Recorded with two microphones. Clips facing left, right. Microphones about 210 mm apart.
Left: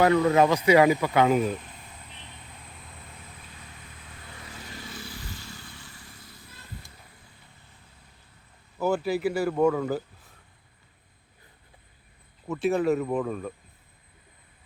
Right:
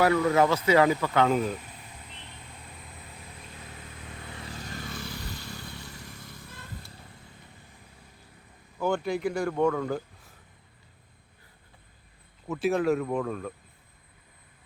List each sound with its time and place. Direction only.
0.0 s speech: 25° left (ahead or behind); by 1.5 s 10° left (ahead or behind)
4.6 s vehicle: 45° right (ahead or behind)
5.2 s motorcycle: 65° right (ahead or behind)
5.9 s vehicle: 40° right (ahead or behind)
8.8 s a man's voice: 5° left (ahead or behind)
12.5 s speech: centre (ahead or behind)